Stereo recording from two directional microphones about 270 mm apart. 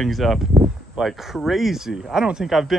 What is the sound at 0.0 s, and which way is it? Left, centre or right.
Speech, centre.